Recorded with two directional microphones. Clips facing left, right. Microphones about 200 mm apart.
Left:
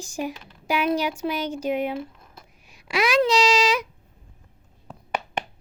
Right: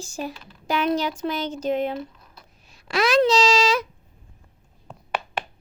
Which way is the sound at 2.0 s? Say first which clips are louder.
Even; 50° left (ahead or behind).